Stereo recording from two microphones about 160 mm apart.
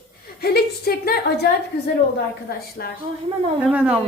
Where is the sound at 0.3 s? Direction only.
80° left.